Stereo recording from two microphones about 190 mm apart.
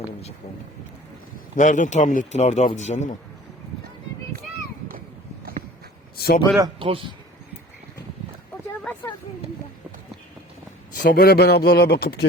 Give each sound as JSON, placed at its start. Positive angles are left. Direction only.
{"t": 1.5, "sound": "a man's voice", "side_deg": 40}
{"t": 6.1, "sound": "speech", "side_deg": 55}
{"t": 6.6, "sound": "a man's voice", "side_deg": -25}
{"t": 8.8, "sound": "a sound", "side_deg": 10}
{"t": 11.0, "sound": "speech", "side_deg": 55}